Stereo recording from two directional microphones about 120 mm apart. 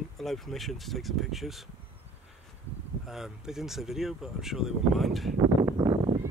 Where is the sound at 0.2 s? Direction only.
Centre (ahead or behind).